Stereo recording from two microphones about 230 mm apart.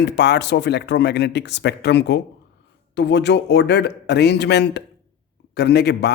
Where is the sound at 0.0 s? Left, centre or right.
Left.